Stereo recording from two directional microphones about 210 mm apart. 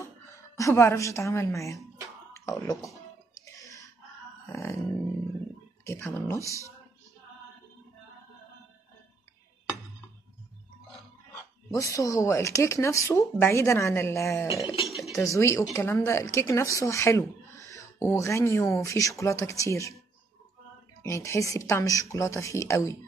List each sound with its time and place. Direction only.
0.6 s speech: 15° left (ahead or behind)
3.5 s whispering: 15° left (ahead or behind)
4.5 s grunt: 10° left (ahead or behind)
5.9 s speech: 10° left (ahead or behind)
11.7 s speech: 15° left (ahead or behind)
14.9 s dishes: centre (ahead or behind)
15.1 s speech: 15° left (ahead or behind)
21.0 s speech: 15° left (ahead or behind)